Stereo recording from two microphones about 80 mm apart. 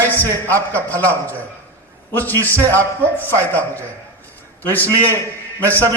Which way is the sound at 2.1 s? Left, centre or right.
Left.